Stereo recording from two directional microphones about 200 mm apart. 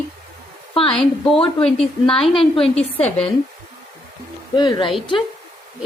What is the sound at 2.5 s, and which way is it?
Speech, 30° left (ahead or behind).